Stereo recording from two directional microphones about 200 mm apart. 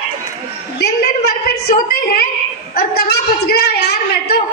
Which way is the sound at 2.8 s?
50° left (ahead or behind).